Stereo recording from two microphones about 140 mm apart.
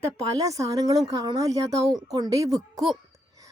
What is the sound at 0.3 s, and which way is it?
A woman's voice, 25° right (ahead or behind).